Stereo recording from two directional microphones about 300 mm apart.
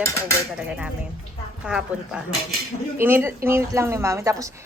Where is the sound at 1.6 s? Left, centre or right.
Centre.